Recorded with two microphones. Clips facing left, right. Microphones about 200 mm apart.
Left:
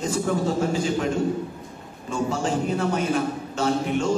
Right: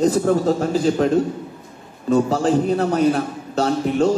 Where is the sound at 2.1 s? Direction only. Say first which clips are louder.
Right 8 dB; 35° right (ahead or behind).